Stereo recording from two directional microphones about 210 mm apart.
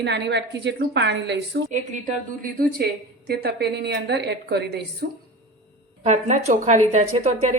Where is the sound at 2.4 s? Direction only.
45° right (ahead or behind).